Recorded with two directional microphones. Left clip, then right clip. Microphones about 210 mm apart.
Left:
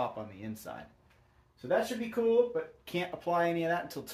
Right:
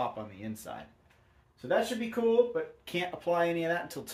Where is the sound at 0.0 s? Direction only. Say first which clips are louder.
Right 1 dB; 5° left (ahead or behind).